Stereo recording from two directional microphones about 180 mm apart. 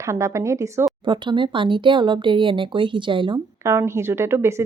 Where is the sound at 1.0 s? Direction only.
25° right (ahead or behind).